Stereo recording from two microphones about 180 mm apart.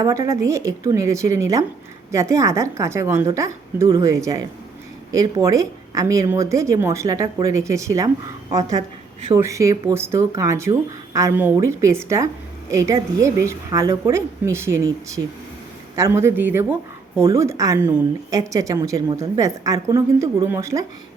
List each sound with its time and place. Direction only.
0.0 s a woman's voice: 15° right (ahead or behind)